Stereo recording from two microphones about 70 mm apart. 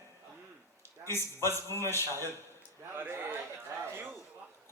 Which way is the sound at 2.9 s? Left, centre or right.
Right.